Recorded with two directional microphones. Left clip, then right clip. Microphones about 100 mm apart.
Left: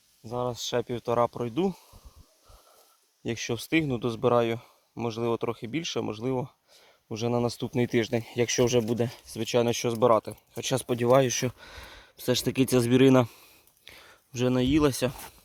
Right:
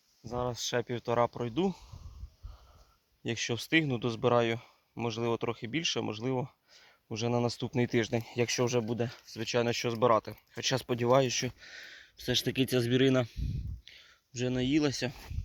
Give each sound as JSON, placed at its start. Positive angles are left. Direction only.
{"t": 0.3, "sound": "speech", "side_deg": 25}
{"t": 3.2, "sound": "speech", "side_deg": 25}
{"t": 7.7, "sound": "speech", "side_deg": 45}
{"t": 8.2, "sound": "speech", "side_deg": 70}
{"t": 11.3, "sound": "speech", "side_deg": 85}